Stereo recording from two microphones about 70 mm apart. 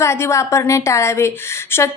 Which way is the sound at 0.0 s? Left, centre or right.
Left.